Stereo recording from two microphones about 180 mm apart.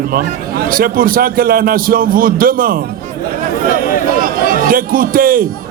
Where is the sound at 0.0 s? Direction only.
55° right (ahead or behind).